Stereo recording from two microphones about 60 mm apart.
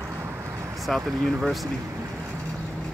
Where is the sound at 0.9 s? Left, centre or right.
Centre.